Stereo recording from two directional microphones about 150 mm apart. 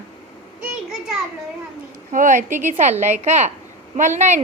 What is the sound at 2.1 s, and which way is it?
A child's voice, 60° right (ahead or behind).